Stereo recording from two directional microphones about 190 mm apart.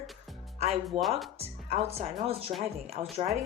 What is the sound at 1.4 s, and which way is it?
Speech, 30° right (ahead or behind).